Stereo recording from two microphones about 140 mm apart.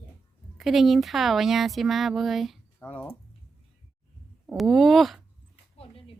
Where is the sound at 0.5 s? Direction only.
Centre (ahead or behind).